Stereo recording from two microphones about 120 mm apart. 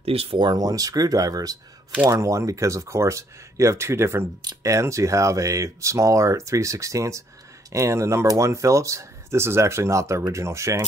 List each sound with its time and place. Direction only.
0.0 s speech: 55° right (ahead or behind)
0.4 s speech: 35° right (ahead or behind)